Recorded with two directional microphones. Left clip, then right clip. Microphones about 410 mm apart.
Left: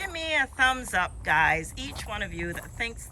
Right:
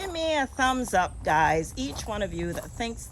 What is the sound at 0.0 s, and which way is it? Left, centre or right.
Speech, centre.